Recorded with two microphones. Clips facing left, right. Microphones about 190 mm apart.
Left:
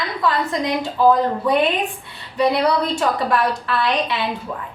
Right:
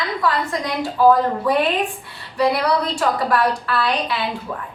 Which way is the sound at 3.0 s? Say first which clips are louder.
Even; 25° left (ahead or behind).